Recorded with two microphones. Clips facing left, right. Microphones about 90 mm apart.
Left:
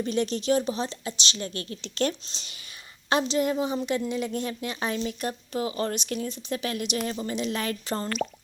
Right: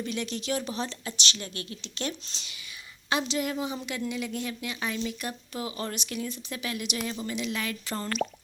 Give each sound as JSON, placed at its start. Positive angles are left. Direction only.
{"t": 0.0, "sound": "speech", "side_deg": 35}
{"t": 1.5, "sound": "speech", "side_deg": 40}